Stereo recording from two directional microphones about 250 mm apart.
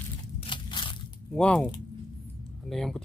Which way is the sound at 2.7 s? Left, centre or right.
Centre.